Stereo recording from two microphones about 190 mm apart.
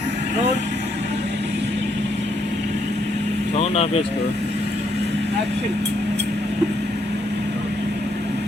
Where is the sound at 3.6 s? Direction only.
30° left (ahead or behind).